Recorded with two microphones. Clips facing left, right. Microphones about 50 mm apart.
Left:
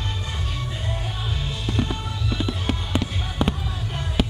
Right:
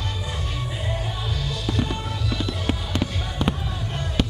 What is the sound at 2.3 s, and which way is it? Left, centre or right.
Music, centre.